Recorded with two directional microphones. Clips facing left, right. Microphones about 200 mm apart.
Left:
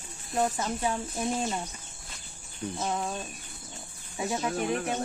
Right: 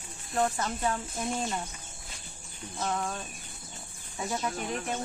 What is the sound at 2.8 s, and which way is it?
Speech, 15° left (ahead or behind).